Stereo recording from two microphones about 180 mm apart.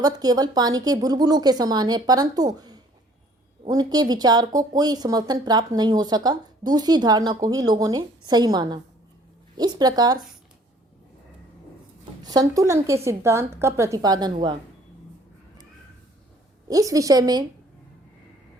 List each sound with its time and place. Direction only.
0.0 s speech: 20° right (ahead or behind)
12.2 s a woman's voice: 20° right (ahead or behind)
16.6 s speech: 20° right (ahead or behind)